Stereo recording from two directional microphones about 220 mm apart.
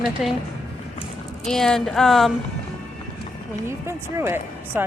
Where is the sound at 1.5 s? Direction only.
Centre (ahead or behind).